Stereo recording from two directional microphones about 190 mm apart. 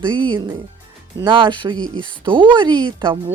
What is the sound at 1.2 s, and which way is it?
Speech, 25° right (ahead or behind).